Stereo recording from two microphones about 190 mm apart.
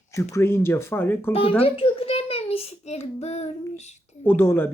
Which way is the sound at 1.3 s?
30° left (ahead or behind).